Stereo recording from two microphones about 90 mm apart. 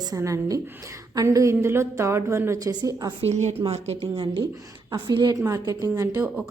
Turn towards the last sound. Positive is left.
turn(degrees=-40)  # may be behind; listen again after turning